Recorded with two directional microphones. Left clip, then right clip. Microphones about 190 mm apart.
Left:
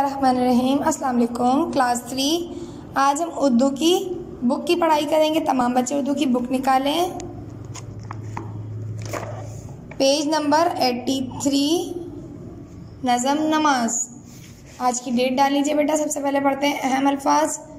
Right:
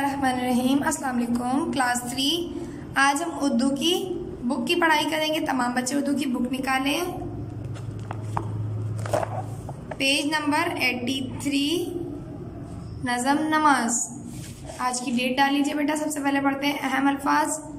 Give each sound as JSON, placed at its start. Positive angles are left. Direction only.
{"t": 0.0, "sound": "a woman's voice", "side_deg": 10}
{"t": 9.9, "sound": "a woman's voice", "side_deg": 20}
{"t": 13.0, "sound": "a woman's voice", "side_deg": 10}